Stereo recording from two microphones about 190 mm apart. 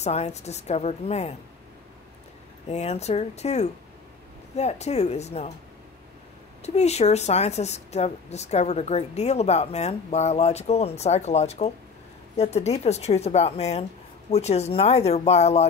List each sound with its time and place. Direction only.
0.0 s speech: 35° left (ahead or behind)
2.7 s speech: 35° left (ahead or behind)
6.6 s speech: 35° left (ahead or behind)